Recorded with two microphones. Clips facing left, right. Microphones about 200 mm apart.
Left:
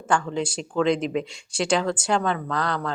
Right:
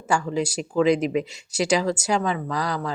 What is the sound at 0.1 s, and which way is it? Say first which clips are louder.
Speech: right 1 dB; 10° right (ahead or behind).